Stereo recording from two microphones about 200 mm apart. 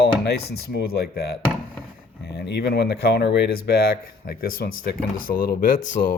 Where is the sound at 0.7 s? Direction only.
55° left (ahead or behind).